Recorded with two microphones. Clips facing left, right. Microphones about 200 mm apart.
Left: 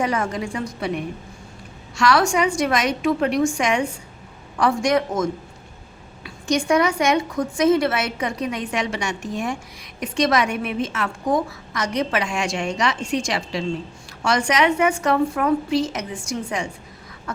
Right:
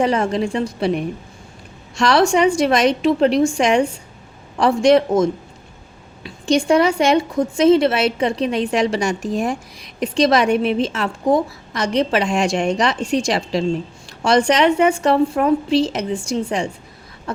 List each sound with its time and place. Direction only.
0.0 s a woman's voice: 30° right (ahead or behind)
2.0 s a woman's voice: 30° right (ahead or behind)